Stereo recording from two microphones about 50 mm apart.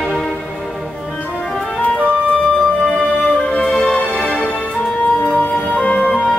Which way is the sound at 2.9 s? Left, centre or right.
Centre.